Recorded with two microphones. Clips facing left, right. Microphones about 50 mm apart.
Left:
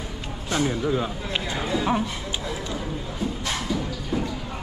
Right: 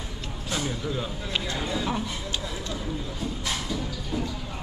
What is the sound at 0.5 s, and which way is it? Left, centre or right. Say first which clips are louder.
Speech: left 7 dB; centre.